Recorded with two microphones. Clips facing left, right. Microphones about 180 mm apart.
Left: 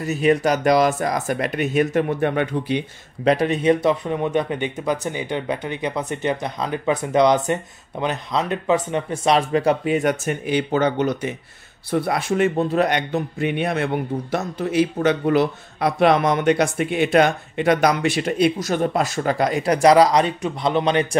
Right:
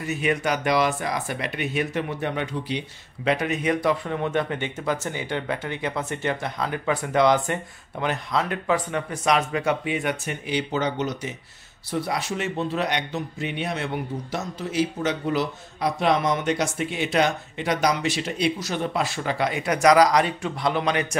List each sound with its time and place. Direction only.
0.0 s speech: 40° left (ahead or behind); by 2.8 s 55° left (ahead or behind)
3.3 s a man's voice: 35° left (ahead or behind)